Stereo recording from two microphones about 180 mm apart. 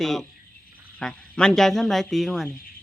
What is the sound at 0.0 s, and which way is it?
Speech, centre (ahead or behind).